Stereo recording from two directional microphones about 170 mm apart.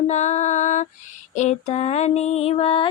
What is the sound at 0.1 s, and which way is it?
Music, 45° left (ahead or behind).